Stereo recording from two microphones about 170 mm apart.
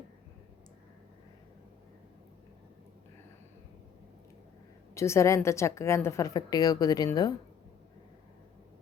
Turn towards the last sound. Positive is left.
turn(degrees=25)  # may be behind; listen again after turning